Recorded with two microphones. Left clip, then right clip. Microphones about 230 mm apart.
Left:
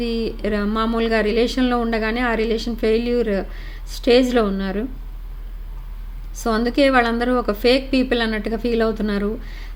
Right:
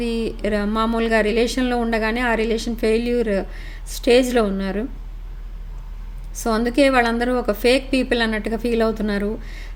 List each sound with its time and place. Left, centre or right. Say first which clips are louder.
0.0 s speech: even; centre
6.3 s speech: even; centre